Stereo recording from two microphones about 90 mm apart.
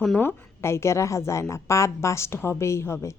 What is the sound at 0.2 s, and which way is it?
A woman's voice, 25° left (ahead or behind).